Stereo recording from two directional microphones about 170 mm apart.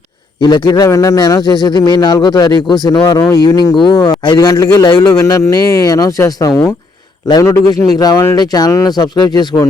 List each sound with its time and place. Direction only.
0.4 s a man's voice: 25° left (ahead or behind)